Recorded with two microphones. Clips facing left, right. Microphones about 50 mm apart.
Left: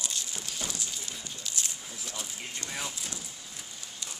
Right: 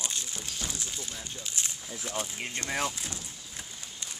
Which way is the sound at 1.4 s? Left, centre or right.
Right.